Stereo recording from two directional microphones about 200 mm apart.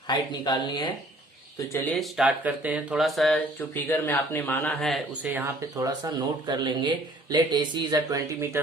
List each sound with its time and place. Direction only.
0.1 s speech: 20° left (ahead or behind)
1.7 s speech: 10° left (ahead or behind); by 8.6 s 15° right (ahead or behind)